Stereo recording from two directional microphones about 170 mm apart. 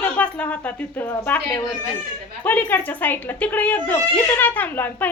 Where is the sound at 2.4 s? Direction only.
10° left (ahead or behind).